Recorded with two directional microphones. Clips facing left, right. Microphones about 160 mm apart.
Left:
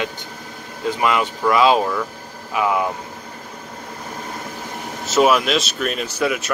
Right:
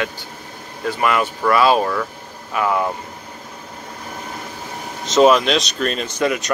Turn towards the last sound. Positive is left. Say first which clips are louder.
# right 2 dB
turn(degrees=5)  # may be behind; listen again after turning